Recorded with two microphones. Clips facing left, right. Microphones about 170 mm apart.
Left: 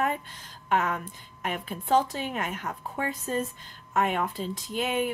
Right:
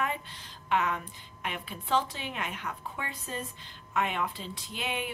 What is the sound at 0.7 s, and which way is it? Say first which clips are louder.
Speech: left 2 dB; 45° left (ahead or behind).